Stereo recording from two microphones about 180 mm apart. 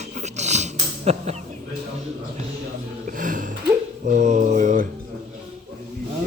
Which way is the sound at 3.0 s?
50° right (ahead or behind).